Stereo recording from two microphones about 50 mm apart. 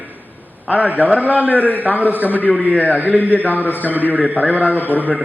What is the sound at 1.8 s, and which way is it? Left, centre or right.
A man's voice, right.